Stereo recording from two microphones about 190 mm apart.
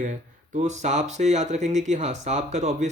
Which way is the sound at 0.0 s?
40° right (ahead or behind).